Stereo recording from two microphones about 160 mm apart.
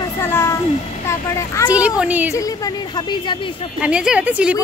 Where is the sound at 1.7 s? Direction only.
5° right (ahead or behind).